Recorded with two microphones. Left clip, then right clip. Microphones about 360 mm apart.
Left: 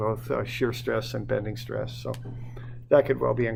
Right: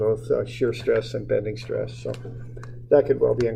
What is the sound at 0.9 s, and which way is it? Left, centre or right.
Speech, left.